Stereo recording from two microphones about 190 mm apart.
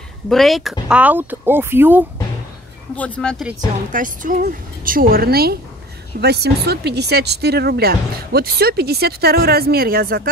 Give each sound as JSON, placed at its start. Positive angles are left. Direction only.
{"t": 0.3, "sound": "speech", "side_deg": 0}
{"t": 3.0, "sound": "speech", "side_deg": 5}
{"t": 3.9, "sound": "a woman's voice", "side_deg": -45}